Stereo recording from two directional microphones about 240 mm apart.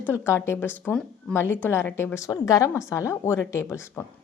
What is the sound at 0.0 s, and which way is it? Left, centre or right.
Speech, centre.